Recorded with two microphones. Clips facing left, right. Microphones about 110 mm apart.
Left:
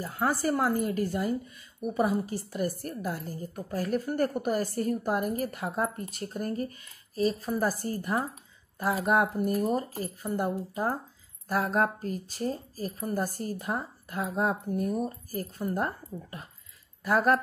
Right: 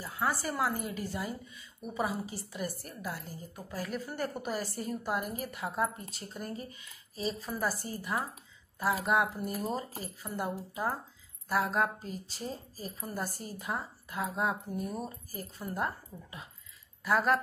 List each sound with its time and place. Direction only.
0.0 s a woman's voice: 45° left (ahead or behind)